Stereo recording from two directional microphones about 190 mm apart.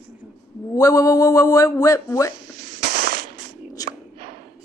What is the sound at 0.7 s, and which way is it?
Speech, 20° left (ahead or behind).